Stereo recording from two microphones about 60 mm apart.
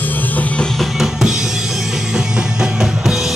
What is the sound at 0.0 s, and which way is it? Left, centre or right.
Music, left.